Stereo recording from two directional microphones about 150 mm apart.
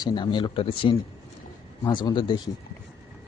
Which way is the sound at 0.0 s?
30° left (ahead or behind).